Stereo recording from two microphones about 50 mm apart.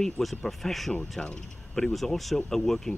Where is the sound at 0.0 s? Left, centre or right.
Centre.